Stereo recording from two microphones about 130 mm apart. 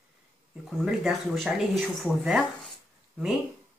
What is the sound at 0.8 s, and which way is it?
Speech, 5° right (ahead or behind).